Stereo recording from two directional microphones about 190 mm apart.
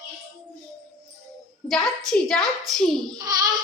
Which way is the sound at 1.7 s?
5° left (ahead or behind).